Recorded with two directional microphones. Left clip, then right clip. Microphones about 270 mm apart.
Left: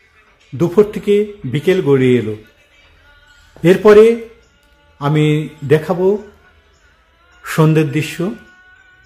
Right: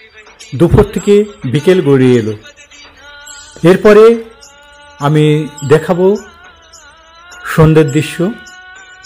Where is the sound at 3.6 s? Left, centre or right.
Centre.